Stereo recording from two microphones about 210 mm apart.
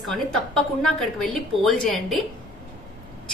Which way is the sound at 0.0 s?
Centre (ahead or behind).